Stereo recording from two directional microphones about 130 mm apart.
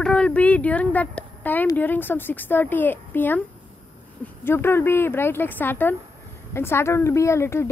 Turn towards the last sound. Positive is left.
turn(degrees=20)  # may be behind; listen again after turning